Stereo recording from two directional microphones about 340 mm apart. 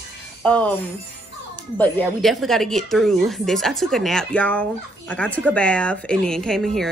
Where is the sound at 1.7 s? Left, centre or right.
Centre.